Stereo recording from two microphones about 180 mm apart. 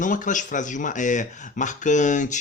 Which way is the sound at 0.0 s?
45° left (ahead or behind).